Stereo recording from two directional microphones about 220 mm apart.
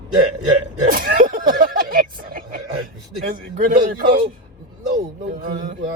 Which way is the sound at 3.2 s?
40° right (ahead or behind).